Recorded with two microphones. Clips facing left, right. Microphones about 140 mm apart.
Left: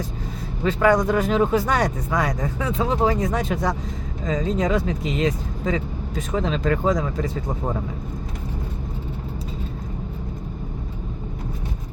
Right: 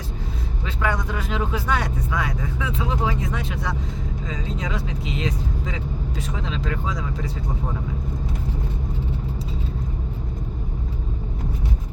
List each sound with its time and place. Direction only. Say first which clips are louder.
0.6 s speech: left 9 dB; 45° left (ahead or behind)